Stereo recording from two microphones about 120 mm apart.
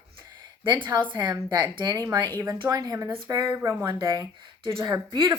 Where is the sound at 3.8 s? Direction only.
40° right (ahead or behind).